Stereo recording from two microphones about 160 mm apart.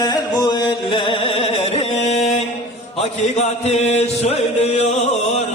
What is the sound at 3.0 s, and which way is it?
Music, 45° left (ahead or behind).